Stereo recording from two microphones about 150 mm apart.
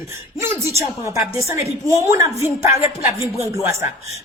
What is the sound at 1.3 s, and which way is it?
A woman's voice, 20° right (ahead or behind).